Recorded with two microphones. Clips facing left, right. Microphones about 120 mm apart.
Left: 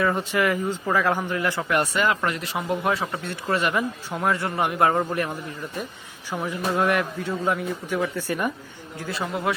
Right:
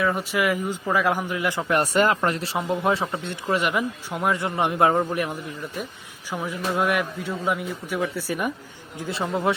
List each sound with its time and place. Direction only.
0.0 s a man's voice: 5° right (ahead or behind)
1.7 s speech: 40° right (ahead or behind); by 3.3 s 25° right (ahead or behind)
3.4 s a man's voice: 15° right (ahead or behind)
6.5 s a man's voice: 5° right (ahead or behind)
9.0 s speech: 20° right (ahead or behind)